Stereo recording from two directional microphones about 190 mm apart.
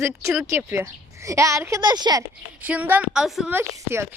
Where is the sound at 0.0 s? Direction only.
15° right (ahead or behind).